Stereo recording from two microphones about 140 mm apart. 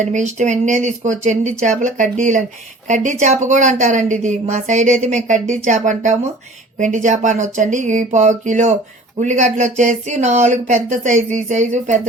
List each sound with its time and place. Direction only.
0.0 s a woman's voice: 60° right (ahead or behind)